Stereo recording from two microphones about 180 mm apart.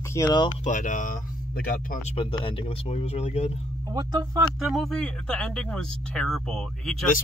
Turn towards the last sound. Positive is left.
turn(degrees=0)  # may be behind; listen again after turning